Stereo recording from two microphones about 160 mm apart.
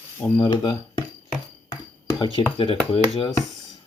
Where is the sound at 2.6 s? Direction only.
30° left (ahead or behind).